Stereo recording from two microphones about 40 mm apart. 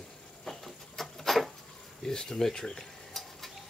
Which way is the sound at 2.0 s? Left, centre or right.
Centre.